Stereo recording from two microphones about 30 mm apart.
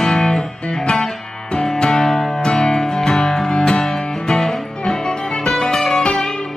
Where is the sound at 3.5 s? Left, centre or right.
Left.